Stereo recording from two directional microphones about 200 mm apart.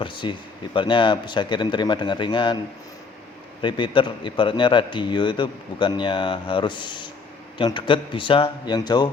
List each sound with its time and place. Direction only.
0.0 s a man's voice: 25° left (ahead or behind)
3.6 s a man's voice: 25° left (ahead or behind)